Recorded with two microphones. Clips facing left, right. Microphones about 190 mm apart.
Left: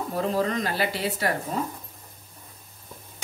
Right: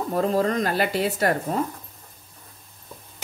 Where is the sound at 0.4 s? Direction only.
50° right (ahead or behind).